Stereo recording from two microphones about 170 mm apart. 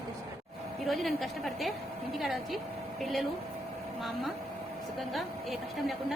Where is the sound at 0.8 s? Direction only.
Centre (ahead or behind).